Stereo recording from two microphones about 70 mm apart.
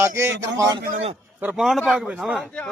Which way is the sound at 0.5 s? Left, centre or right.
Right.